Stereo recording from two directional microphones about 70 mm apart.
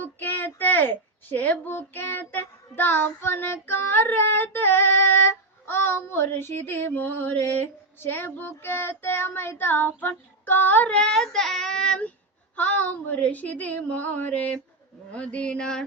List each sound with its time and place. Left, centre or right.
0.0 s speech: left; by 12.0 s centre
12.5 s a woman's voice: left
15.1 s a sound: centre